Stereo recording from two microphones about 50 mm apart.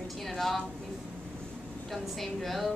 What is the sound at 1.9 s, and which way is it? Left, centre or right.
Speech, centre.